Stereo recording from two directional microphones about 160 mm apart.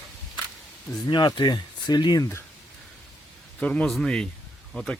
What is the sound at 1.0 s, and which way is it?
Speech, 25° left (ahead or behind).